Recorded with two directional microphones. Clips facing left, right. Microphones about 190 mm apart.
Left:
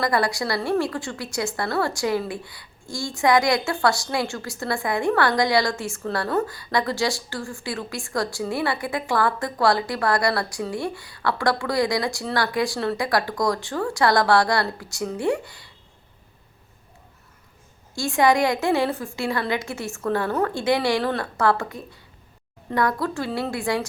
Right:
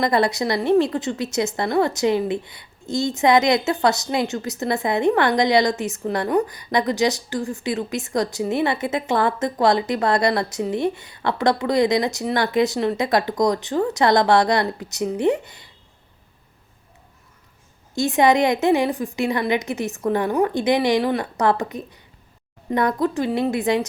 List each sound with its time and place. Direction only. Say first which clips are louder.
0.0 s a woman's voice: right 3 dB; 20° right (ahead or behind)
17.9 s a woman's voice: right 3 dB; 20° right (ahead or behind)